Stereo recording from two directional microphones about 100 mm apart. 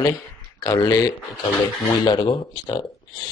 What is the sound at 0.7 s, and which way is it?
Speech, 40° left (ahead or behind).